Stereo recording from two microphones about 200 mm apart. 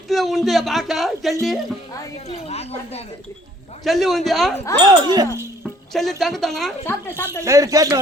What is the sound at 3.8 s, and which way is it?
Speech, centre (ahead or behind).